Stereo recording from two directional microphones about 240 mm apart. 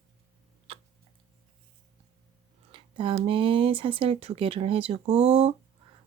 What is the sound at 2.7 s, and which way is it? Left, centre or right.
Speech, right.